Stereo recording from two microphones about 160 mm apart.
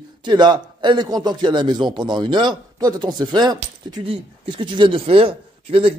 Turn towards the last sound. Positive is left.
turn(degrees=-35)  # may be behind; listen again after turning